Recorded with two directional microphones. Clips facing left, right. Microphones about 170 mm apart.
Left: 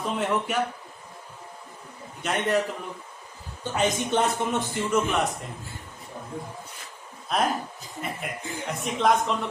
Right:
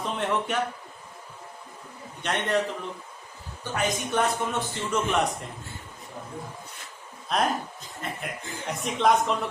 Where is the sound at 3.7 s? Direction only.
25° left (ahead or behind).